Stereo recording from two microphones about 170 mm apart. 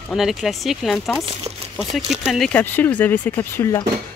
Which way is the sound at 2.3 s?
5° left (ahead or behind).